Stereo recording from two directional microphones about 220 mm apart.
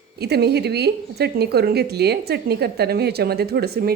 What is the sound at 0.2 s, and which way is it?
Speech, 50° right (ahead or behind).